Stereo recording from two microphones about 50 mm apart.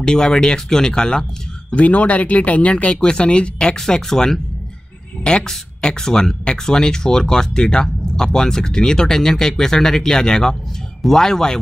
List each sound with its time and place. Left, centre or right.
0.0 s speech: centre
1.7 s speech: left; by 11.6 s centre